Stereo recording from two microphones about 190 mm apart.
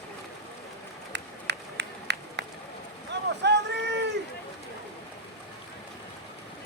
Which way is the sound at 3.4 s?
65° right (ahead or behind).